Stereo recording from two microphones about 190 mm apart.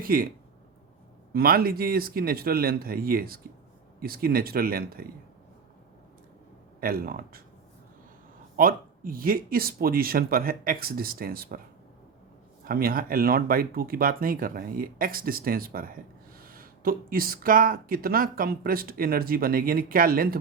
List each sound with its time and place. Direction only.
0.0 s speech: 50° right (ahead or behind)
6.7 s speech: 50° right (ahead or behind)
8.5 s speech: 50° right (ahead or behind)
12.6 s speech: 50° right (ahead or behind)